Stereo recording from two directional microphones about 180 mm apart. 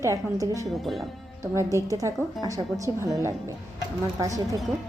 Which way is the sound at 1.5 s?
15° right (ahead or behind).